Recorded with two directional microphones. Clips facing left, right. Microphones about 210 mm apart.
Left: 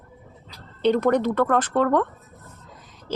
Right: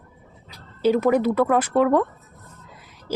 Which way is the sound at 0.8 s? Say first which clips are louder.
Right 1 dB; 5° right (ahead or behind).